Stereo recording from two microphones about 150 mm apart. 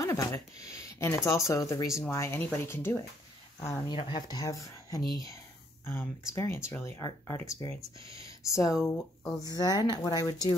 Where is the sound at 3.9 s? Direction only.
30° left (ahead or behind).